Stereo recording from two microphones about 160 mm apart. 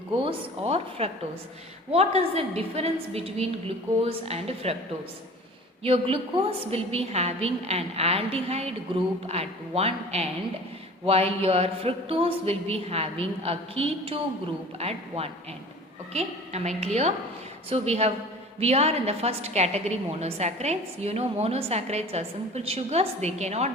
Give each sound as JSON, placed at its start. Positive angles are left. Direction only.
{"t": 0.2, "sound": "a woman's voice", "side_deg": -35}
{"t": 5.8, "sound": "a woman's voice", "side_deg": -35}